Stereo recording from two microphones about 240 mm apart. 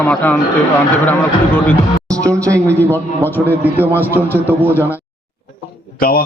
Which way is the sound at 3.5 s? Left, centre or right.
Centre.